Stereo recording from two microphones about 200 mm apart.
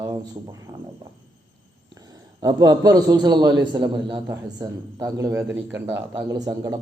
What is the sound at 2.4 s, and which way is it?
A man's voice, 20° right (ahead or behind).